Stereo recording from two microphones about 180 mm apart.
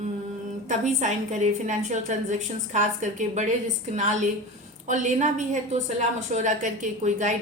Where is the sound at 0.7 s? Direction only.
40° right (ahead or behind).